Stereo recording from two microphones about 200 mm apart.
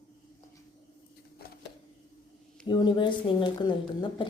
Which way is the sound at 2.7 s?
25° left (ahead or behind).